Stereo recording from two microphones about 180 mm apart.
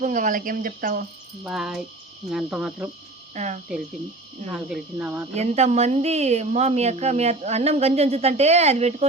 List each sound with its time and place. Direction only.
0.0 s speech: 45° right (ahead or behind)
1.5 s speech: 5° right (ahead or behind)
3.3 s speech: 40° right (ahead or behind)
4.5 s speech: 5° right (ahead or behind)
5.3 s speech: 40° right (ahead or behind)